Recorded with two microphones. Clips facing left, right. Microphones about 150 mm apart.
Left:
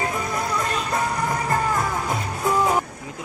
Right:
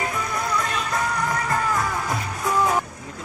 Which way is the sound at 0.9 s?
25° left (ahead or behind).